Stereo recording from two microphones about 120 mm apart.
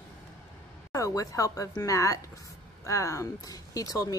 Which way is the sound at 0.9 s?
30° left (ahead or behind).